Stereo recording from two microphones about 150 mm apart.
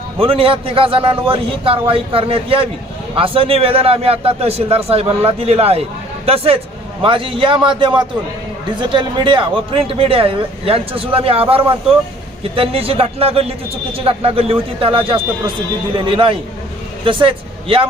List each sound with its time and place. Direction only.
0.2 s speech: 35° right (ahead or behind)